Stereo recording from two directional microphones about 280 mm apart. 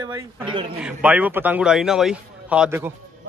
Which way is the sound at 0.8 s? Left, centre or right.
Centre.